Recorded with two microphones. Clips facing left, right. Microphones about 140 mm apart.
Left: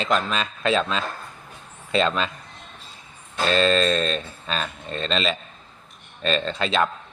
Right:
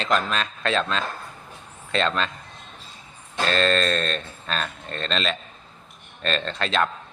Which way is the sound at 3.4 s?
5° left (ahead or behind).